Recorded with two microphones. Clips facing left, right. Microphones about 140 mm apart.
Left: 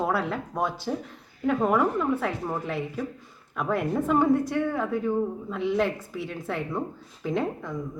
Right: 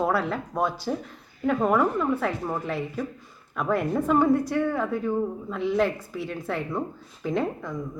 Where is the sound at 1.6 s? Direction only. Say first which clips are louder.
Right 1 dB; 20° left (ahead or behind).